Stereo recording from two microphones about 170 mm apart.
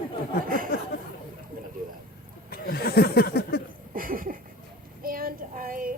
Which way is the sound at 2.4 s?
60° left (ahead or behind).